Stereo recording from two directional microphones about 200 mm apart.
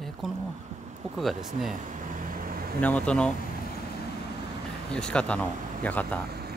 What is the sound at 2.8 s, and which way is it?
Speech, 5° left (ahead or behind).